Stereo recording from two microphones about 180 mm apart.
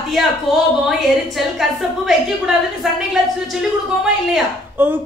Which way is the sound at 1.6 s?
Centre (ahead or behind).